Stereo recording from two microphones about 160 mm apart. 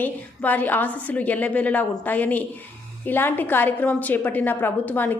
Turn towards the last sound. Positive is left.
turn(degrees=10)  # may be behind; listen again after turning